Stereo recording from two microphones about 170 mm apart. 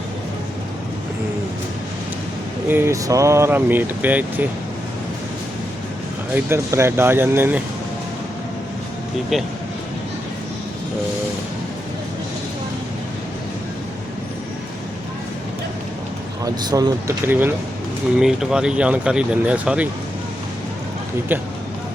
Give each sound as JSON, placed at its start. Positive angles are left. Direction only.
{"t": 2.6, "sound": "speech", "side_deg": -15}
{"t": 6.3, "sound": "speech", "side_deg": -15}
{"t": 9.3, "sound": "speech", "side_deg": 0}
{"t": 16.4, "sound": "speech", "side_deg": -20}
{"t": 18.2, "sound": "speech", "side_deg": -5}